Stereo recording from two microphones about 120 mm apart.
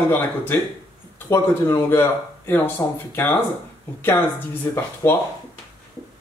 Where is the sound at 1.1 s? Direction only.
20° left (ahead or behind).